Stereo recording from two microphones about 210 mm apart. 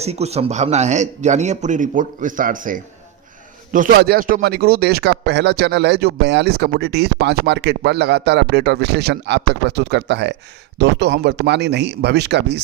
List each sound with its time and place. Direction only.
0.0 s speech: 30° right (ahead or behind); by 12.6 s 55° right (ahead or behind)